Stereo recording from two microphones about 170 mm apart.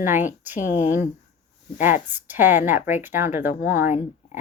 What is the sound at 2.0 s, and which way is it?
Speech, 10° right (ahead or behind).